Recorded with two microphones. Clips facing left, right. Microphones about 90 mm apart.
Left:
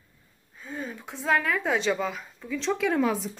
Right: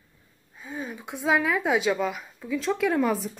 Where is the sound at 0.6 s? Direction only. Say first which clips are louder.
Right 1 dB; 10° right (ahead or behind).